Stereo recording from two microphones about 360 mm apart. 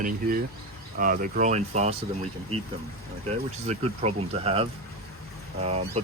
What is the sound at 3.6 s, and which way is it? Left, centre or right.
Speech, centre.